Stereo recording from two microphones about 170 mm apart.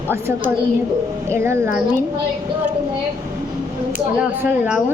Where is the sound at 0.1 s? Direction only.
15° right (ahead or behind).